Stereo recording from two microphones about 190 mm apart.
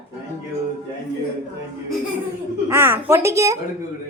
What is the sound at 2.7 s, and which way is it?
Speech, 10° right (ahead or behind).